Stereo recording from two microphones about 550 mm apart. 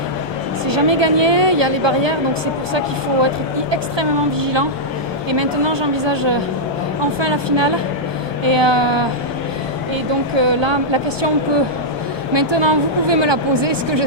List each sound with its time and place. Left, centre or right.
0.7 s a woman's voice: right
3.7 s a woman's voice: right
10.3 s a woman's voice: right
12.3 s a woman's voice: right